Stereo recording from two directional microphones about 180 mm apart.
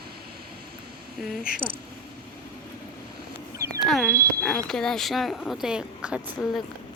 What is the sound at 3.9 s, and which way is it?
Speech, centre (ahead or behind).